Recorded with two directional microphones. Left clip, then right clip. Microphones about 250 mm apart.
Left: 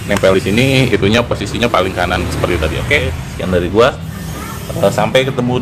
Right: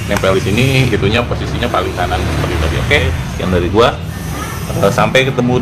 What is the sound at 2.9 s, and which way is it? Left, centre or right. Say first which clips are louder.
Speech: right 2 dB; centre.